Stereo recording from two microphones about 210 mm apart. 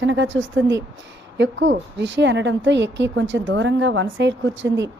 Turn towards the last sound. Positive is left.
turn(degrees=-60)  # may be behind; listen again after turning